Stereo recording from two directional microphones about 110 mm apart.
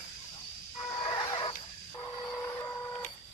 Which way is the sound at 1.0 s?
45° left (ahead or behind).